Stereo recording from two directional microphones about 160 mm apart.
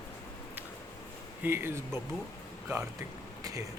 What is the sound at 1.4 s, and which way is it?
Speech, 15° right (ahead or behind).